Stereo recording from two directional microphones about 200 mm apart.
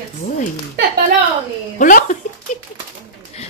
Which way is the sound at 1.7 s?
40° left (ahead or behind).